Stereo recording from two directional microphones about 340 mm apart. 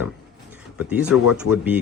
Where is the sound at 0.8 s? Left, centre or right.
Centre.